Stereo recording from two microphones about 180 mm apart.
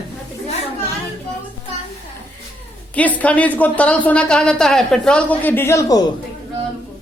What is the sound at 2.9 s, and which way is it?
A woman's voice, 10° left (ahead or behind).